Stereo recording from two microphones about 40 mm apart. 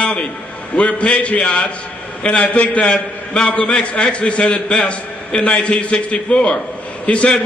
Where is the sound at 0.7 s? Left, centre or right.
Left.